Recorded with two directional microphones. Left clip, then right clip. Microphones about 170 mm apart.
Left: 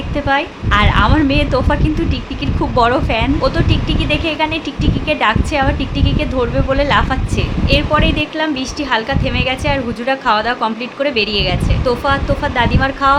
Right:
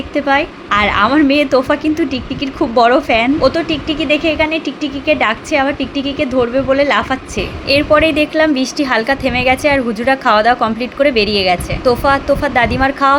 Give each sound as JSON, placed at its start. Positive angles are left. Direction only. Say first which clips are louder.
{"t": 0.3, "sound": "a woman's voice", "louder": "right 1 dB", "side_deg": -20}
{"t": 7.7, "sound": "a woman's voice", "louder": "right 4 dB", "side_deg": -30}